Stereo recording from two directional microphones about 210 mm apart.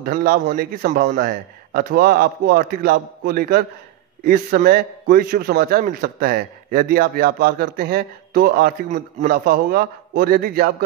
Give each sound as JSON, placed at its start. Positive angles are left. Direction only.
{"t": 0.0, "sound": "a man's voice", "side_deg": -45}